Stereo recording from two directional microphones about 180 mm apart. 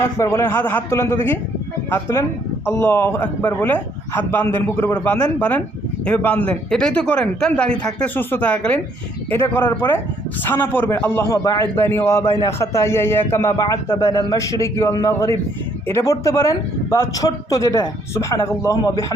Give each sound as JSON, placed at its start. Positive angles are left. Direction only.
{"t": 0.0, "sound": "a man's voice", "side_deg": 15}